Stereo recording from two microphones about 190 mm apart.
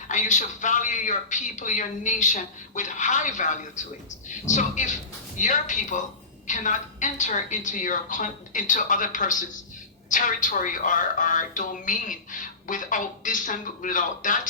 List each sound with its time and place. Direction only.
0.1 s a woman's voice: 40° left (ahead or behind)